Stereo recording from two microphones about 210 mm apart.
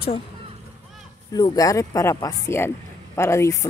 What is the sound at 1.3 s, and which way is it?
Speech, 20° left (ahead or behind).